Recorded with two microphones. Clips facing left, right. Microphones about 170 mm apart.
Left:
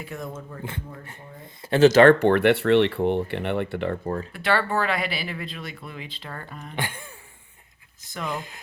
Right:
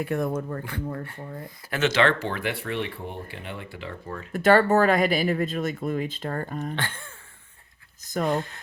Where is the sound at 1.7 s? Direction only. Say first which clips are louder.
Left 9 dB; 40° left (ahead or behind).